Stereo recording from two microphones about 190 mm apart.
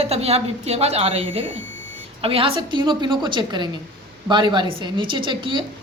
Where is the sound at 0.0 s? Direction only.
35° right (ahead or behind).